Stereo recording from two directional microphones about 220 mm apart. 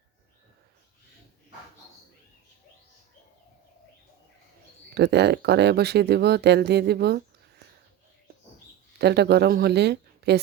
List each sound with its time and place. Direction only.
4.9 s speech: 50° right (ahead or behind)
9.0 s speech: 50° right (ahead or behind)